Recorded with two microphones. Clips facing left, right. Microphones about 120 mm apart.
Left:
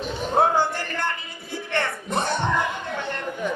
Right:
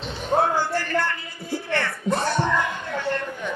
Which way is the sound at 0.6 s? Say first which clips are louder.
Right 2 dB; 20° left (ahead or behind).